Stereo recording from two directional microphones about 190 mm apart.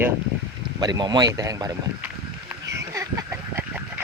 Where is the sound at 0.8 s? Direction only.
20° right (ahead or behind).